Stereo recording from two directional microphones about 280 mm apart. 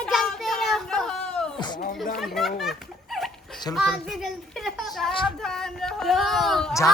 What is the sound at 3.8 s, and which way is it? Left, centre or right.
A child's voice, centre.